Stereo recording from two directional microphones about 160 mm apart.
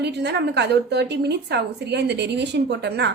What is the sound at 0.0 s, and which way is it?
A woman's voice, 90° right.